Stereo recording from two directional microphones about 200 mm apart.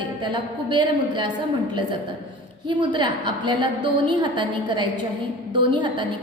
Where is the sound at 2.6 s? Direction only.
25° right (ahead or behind).